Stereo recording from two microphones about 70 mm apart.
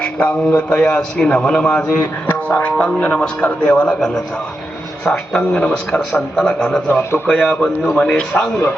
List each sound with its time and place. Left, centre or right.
0.0 s a man's voice: centre
6.8 s a man's voice: left
7.3 s a man's voice: centre